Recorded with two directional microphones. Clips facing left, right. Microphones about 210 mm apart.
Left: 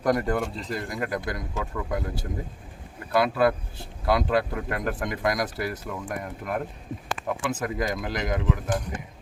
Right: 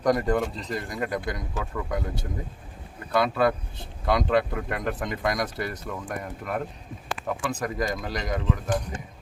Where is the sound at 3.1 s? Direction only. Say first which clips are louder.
Left 1 dB; 5° left (ahead or behind).